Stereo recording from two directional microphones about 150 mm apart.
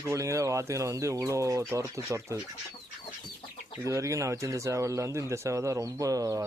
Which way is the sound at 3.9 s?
20° right (ahead or behind).